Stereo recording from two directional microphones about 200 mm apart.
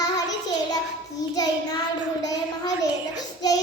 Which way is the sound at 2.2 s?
20° left (ahead or behind).